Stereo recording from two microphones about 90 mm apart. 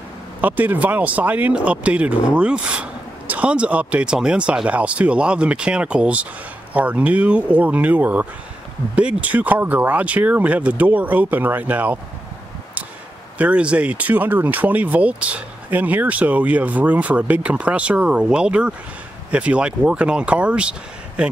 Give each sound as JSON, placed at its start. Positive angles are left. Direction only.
{"t": 0.4, "sound": "speech", "side_deg": -20}
{"t": 13.4, "sound": "speech", "side_deg": -15}